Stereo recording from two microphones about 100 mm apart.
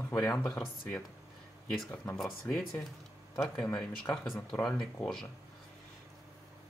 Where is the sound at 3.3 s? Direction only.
5° left (ahead or behind).